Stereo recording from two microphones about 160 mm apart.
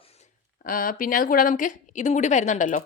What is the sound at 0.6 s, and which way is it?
A woman's voice, 60° left (ahead or behind).